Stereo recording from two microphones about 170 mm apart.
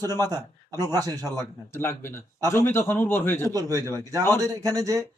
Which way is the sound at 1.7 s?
15° left (ahead or behind).